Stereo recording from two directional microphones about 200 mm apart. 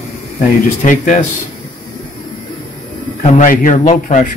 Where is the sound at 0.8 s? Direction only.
40° left (ahead or behind).